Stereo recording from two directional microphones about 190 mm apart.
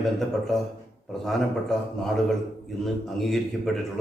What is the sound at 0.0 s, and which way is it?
A man's voice, centre (ahead or behind).